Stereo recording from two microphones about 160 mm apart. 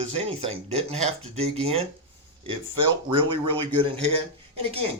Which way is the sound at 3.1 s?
30° right (ahead or behind).